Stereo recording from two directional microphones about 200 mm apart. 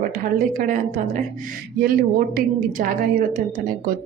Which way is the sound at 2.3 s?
45° right (ahead or behind).